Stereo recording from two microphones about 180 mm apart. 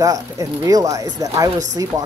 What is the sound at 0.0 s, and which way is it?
Speech, 20° right (ahead or behind).